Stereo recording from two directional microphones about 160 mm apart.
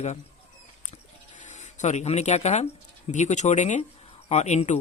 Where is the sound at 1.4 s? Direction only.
50° left (ahead or behind).